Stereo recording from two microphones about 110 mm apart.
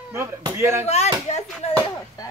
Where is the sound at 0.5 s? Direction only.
25° right (ahead or behind).